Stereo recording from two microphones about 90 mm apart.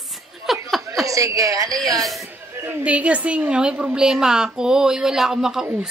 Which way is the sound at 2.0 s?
Centre (ahead or behind).